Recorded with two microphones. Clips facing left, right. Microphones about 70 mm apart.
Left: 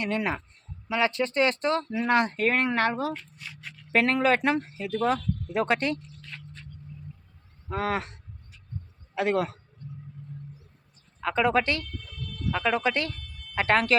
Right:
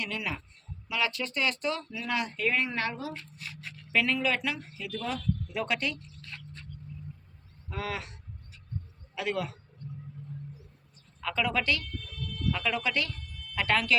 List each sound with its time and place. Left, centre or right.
0.0 s speech: left
7.7 s speech: left
9.1 s speech: left
11.2 s speech: left